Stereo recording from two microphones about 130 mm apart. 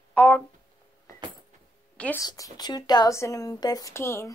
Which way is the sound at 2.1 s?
25° left (ahead or behind).